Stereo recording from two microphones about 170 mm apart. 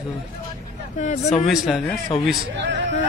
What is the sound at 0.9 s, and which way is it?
Speech, 40° left (ahead or behind).